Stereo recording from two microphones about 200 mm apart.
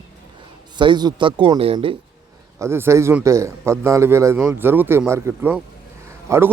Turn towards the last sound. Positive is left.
turn(degrees=-10)  # may be behind; listen again after turning